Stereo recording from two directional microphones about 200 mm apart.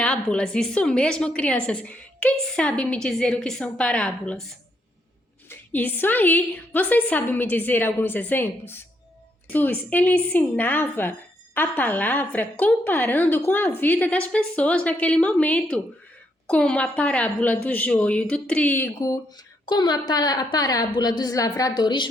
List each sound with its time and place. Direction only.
0.0 s a woman's voice: 5° left (ahead or behind)
5.5 s a woman's voice: 10° left (ahead or behind)